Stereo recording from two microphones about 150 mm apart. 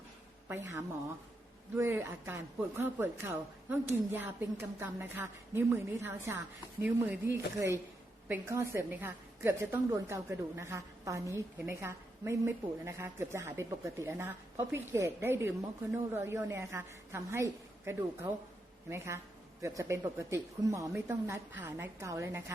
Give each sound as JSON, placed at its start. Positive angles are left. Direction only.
{"t": 0.4, "sound": "a woman's voice", "side_deg": -15}